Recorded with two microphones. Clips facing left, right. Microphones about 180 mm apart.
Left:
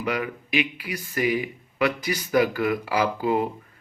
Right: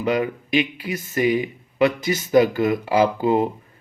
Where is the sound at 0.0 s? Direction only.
25° right (ahead or behind).